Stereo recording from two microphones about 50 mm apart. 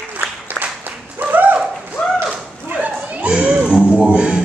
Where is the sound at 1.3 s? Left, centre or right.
Right.